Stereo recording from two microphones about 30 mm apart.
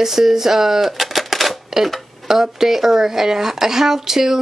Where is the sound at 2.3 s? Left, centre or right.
Centre.